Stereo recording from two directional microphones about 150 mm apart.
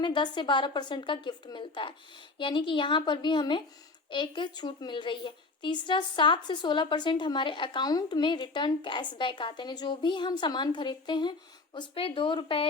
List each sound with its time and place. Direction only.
0.0 s a woman's voice: 30° left (ahead or behind)